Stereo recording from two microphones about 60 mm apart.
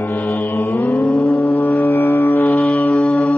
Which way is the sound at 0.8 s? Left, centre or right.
Centre.